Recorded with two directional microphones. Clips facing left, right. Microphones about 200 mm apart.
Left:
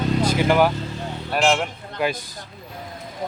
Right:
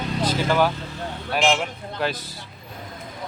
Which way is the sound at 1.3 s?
Centre (ahead or behind).